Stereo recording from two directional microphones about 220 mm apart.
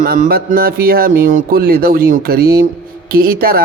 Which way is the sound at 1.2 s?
40° right (ahead or behind).